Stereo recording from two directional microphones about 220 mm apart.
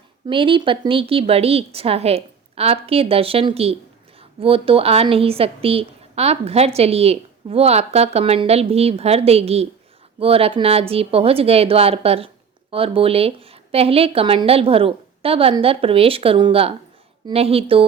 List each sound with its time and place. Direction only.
0.3 s a woman's voice: 25° right (ahead or behind)